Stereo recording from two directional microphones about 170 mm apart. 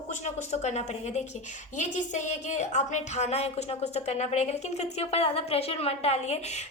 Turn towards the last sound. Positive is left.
turn(degrees=40)  # may be behind; listen again after turning